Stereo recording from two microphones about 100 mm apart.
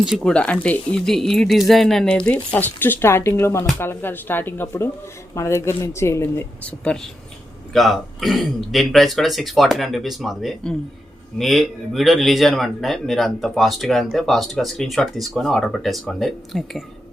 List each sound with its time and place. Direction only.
0.0 s speech: 5° right (ahead or behind)
0.3 s speech: 10° left (ahead or behind); by 6.4 s 25° left (ahead or behind)
6.7 s a man's voice: 10° left (ahead or behind)